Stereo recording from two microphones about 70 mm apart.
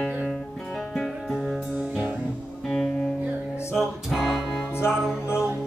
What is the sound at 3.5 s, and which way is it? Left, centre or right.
Music, left.